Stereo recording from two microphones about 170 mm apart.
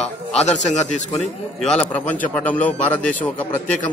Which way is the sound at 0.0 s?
40° left (ahead or behind).